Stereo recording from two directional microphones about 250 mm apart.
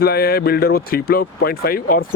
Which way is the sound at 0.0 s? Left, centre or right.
Left.